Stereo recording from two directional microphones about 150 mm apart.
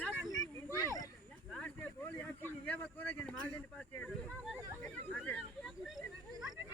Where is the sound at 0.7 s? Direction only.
25° left (ahead or behind).